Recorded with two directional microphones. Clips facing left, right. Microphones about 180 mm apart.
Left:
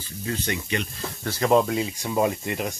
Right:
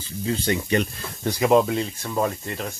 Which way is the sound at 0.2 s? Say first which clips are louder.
Right 5 dB; 25° right (ahead or behind).